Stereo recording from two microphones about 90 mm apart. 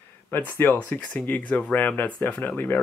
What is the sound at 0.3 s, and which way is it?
Speech, 25° left (ahead or behind).